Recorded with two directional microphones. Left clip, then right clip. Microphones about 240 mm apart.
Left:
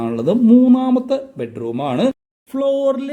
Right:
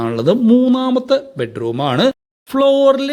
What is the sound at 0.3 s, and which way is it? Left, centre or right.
Speech, centre.